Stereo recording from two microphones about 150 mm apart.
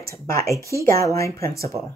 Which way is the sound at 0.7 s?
90° right.